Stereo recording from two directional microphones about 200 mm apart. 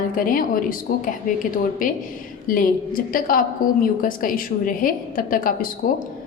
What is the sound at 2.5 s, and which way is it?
A woman's voice, 45° left (ahead or behind).